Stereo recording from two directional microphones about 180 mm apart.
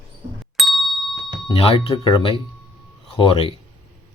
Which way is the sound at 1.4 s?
30° left (ahead or behind).